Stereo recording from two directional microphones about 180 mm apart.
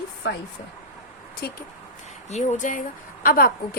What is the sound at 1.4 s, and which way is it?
Speech, 60° left (ahead or behind).